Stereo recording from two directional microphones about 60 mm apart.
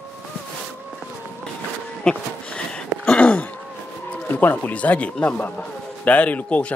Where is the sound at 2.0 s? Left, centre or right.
Centre.